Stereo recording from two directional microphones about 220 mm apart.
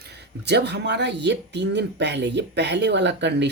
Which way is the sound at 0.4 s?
50° right (ahead or behind).